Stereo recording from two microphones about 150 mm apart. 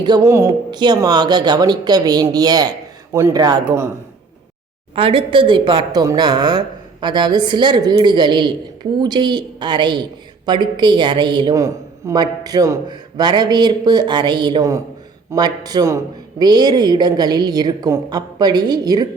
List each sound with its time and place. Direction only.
0.0 s a woman's voice: 25° right (ahead or behind)
4.9 s a woman's voice: 35° right (ahead or behind)